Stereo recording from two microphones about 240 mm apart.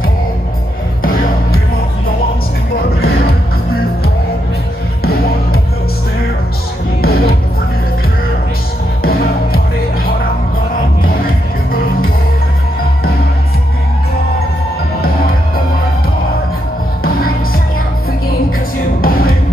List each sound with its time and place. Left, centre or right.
1.0 s music: left
5.0 s music: left
7.0 s music: left
9.0 s music: left
18.9 s music: left